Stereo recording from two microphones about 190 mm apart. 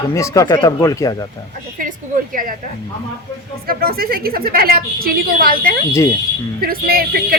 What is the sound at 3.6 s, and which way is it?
A woman's voice, 50° right (ahead or behind).